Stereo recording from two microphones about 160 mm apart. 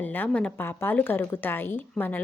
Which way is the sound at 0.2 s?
10° left (ahead or behind).